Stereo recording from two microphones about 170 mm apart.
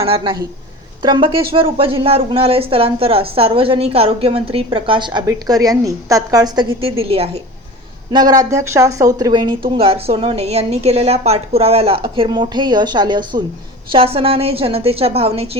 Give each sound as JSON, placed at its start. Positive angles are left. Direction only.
{"t": 0.0, "sound": "speech", "side_deg": -35}
{"t": 8.1, "sound": "a woman's voice", "side_deg": -25}